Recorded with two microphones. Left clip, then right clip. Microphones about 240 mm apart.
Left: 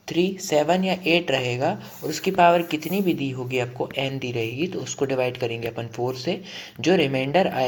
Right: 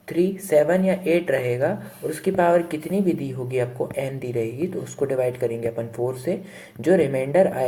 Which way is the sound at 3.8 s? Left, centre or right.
Left.